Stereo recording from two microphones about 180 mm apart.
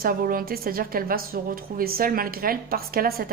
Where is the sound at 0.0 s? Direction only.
55° right (ahead or behind).